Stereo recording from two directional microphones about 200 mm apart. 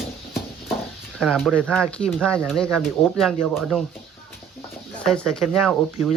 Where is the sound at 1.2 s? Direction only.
Centre (ahead or behind).